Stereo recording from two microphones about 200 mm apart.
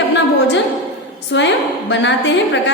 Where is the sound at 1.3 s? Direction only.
60° left (ahead or behind).